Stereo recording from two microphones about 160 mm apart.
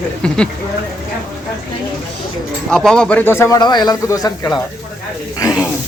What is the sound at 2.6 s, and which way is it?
Speech, 5° left (ahead or behind).